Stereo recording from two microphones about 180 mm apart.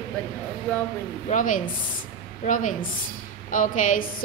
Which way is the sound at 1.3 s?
45° left (ahead or behind).